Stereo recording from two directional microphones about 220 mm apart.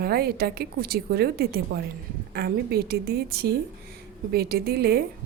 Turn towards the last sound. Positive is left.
turn(degrees=-45)  # may be behind; listen again after turning